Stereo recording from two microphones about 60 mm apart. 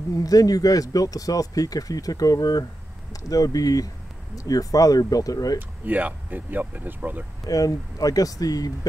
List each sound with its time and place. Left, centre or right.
0.2 s speech: left
5.9 s speech: right
7.4 s speech: left